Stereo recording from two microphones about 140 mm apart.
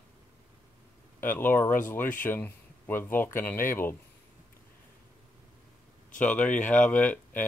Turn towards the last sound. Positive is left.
turn(degrees=10)  # may be behind; listen again after turning